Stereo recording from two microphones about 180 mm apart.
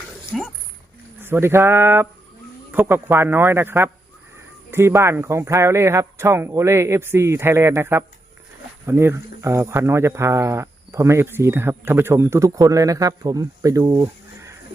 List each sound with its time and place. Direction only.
1.2 s speech: 15° right (ahead or behind)